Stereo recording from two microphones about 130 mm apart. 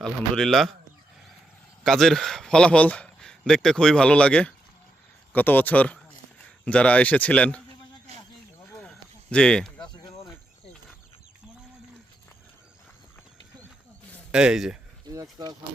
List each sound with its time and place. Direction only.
0.0 s a man's voice: 5° left (ahead or behind)
1.8 s a man's voice: centre (ahead or behind)
8.7 s a sound: 5° left (ahead or behind)
14.3 s a man's voice: 5° right (ahead or behind)
15.0 s speech: 30° right (ahead or behind)